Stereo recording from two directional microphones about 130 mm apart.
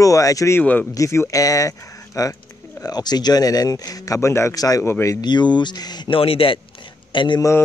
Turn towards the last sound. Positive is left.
turn(degrees=25)  # may be behind; listen again after turning